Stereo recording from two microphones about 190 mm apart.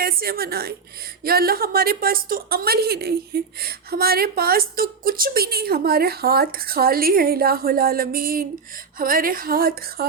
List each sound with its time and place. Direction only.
0.0 s a woman's voice: 50° right (ahead or behind)